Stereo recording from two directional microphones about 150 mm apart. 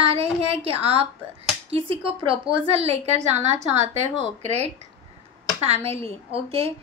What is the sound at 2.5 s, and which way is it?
A woman's voice, 40° right (ahead or behind).